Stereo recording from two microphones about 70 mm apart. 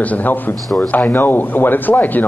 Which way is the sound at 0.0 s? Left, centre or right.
Left.